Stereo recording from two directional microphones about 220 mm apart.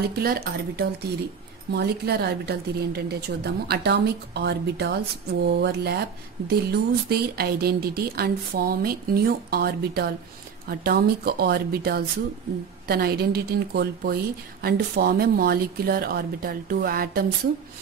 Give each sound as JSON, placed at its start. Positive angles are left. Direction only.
{"t": 0.1, "sound": "a woman's voice", "side_deg": -45}